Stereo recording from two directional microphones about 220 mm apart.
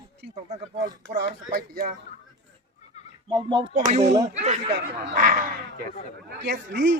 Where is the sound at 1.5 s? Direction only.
40° right (ahead or behind).